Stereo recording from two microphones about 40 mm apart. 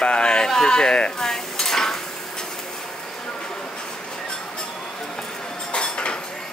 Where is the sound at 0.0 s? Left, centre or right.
Left.